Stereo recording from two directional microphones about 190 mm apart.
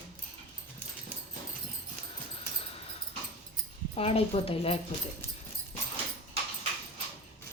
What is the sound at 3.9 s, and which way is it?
Speech, 30° left (ahead or behind).